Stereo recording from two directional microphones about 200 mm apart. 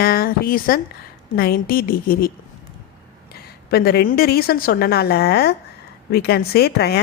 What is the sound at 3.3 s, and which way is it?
Speech, 50° left (ahead or behind).